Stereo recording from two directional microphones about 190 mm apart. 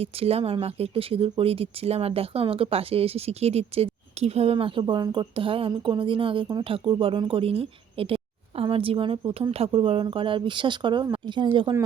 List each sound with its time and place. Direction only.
0.0 s speech: 30° right (ahead or behind)